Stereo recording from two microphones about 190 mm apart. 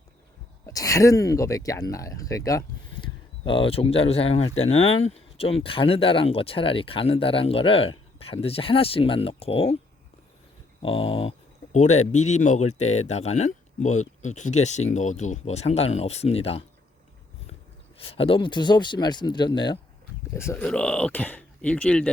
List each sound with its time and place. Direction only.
0.6 s speech: 15° left (ahead or behind)
10.8 s speech: 30° left (ahead or behind)
18.1 s speech: 30° left (ahead or behind)
20.3 s speech: 15° left (ahead or behind)